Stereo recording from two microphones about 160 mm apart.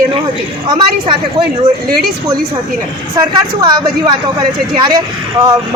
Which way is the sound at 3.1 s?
25° right (ahead or behind).